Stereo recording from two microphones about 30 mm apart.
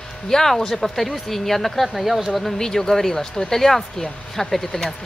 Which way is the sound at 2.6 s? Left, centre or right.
Centre.